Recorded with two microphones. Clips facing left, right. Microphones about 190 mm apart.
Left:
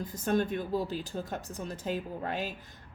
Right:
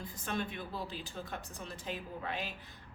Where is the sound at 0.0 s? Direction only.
40° left (ahead or behind).